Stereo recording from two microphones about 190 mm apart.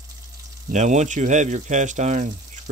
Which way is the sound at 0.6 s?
40° right (ahead or behind).